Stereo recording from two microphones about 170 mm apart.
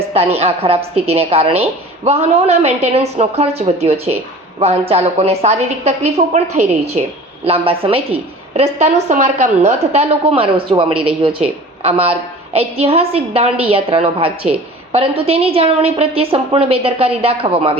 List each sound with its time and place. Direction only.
0.1 s a woman's voice: 35° right (ahead or behind)